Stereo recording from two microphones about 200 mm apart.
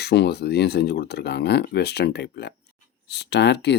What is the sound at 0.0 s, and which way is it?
Speech, 55° left (ahead or behind).